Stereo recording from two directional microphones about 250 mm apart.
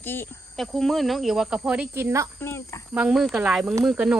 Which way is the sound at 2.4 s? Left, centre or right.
Centre.